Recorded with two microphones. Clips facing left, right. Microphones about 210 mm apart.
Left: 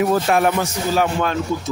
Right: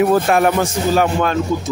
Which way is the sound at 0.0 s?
55° right (ahead or behind).